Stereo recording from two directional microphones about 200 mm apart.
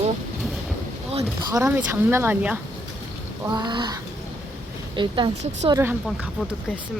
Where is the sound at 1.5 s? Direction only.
15° right (ahead or behind).